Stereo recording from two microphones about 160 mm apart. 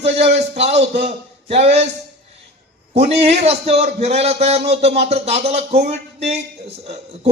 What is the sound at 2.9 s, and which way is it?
A man's voice, 40° right (ahead or behind).